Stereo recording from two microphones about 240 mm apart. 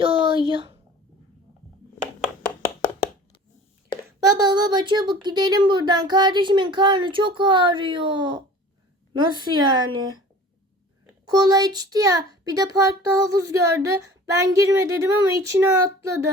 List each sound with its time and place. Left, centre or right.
0.0 s a sound: right
4.3 s a child's voice: centre
11.3 s a child's voice: centre